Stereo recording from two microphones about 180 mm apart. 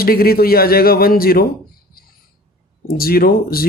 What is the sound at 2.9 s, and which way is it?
Speech, 55° left (ahead or behind).